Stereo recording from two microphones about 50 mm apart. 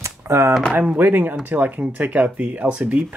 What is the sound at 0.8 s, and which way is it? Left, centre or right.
Speech, right.